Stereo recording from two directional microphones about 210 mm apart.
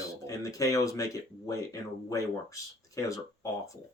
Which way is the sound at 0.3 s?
15° left (ahead or behind).